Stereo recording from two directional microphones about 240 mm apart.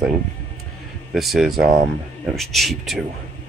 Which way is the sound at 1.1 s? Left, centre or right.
Centre.